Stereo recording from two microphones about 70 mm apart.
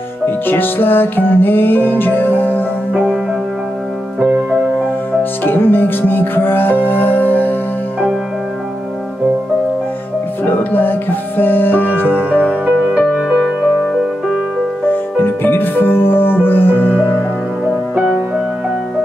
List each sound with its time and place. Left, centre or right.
0.5 s music: left
2.9 s music: centre
4.2 s music: right
5.4 s music: left
10.4 s music: left
12.1 s music: right
13.0 s music: centre
14.9 s music: left